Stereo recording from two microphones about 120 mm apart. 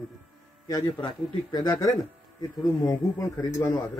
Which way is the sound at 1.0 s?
35° left (ahead or behind).